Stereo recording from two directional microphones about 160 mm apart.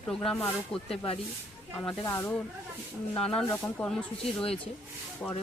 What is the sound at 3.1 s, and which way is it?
Speech, 5° left (ahead or behind).